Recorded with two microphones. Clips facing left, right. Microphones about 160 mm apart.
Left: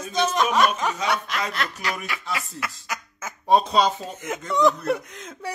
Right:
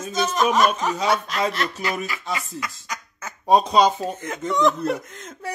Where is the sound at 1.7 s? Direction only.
25° right (ahead or behind).